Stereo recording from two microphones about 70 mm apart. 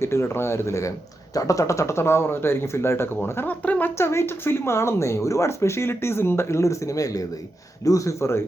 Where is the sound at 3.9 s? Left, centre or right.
Left.